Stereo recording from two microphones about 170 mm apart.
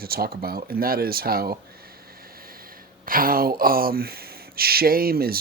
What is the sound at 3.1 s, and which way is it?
Speech, 55° right (ahead or behind).